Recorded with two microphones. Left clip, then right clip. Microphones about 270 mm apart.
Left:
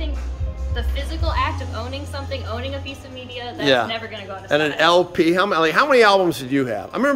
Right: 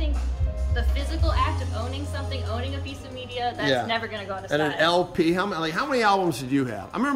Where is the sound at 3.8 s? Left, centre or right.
Centre.